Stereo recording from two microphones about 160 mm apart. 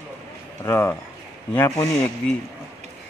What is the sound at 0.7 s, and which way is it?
Speech, 15° left (ahead or behind).